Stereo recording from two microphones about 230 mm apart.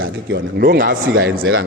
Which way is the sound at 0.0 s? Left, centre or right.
Right.